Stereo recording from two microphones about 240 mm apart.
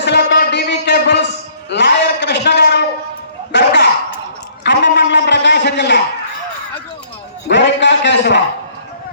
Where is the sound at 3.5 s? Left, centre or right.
Left.